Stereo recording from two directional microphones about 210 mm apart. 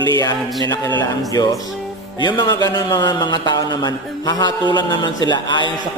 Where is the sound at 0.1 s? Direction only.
20° left (ahead or behind).